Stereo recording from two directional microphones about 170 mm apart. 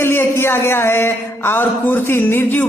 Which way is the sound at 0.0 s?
15° left (ahead or behind).